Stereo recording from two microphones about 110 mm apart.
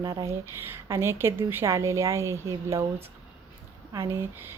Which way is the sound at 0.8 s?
25° right (ahead or behind).